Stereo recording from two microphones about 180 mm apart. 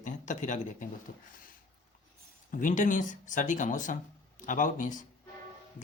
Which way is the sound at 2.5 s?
45° left (ahead or behind).